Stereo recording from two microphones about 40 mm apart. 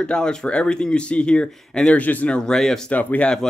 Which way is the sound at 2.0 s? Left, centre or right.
Left.